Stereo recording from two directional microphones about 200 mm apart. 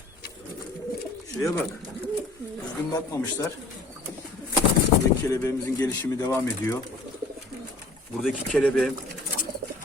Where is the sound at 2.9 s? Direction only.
15° left (ahead or behind).